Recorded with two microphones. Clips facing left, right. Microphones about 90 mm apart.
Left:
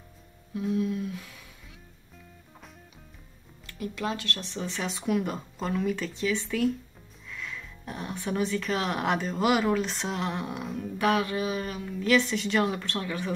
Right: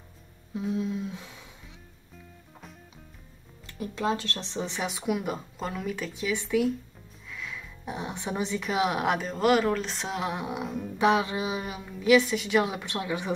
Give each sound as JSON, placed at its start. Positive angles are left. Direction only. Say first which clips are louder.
{"t": 0.7, "sound": "humming", "louder": "left 2 dB", "side_deg": -25}
{"t": 3.6, "sound": "a woman's voice", "louder": "right 3 dB", "side_deg": -30}
{"t": 7.2, "sound": "music", "louder": "even", "side_deg": -5}
{"t": 7.8, "sound": "a woman's voice", "louder": "right 1 dB", "side_deg": -15}
{"t": 11.0, "sound": "a woman's voice", "louder": "right 2 dB", "side_deg": -20}